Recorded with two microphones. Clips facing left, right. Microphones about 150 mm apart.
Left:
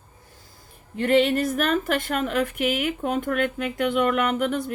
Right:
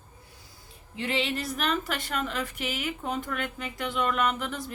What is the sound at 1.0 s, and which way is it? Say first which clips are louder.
A woman's voice: left 10 dB; 50° left (ahead or behind).